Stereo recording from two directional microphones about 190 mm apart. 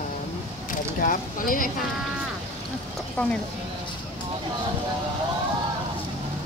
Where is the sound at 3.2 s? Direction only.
10° left (ahead or behind).